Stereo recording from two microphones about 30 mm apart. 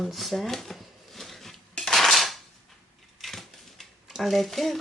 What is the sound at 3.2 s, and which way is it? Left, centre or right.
Typewriter, centre.